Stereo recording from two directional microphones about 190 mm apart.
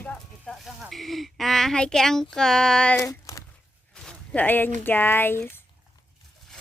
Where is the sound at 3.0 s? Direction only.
15° left (ahead or behind).